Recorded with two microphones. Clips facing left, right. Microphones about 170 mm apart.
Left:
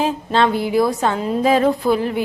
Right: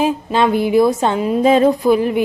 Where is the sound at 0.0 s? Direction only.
10° right (ahead or behind).